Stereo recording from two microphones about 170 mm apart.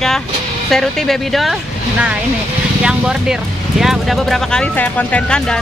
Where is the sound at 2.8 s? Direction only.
5° right (ahead or behind).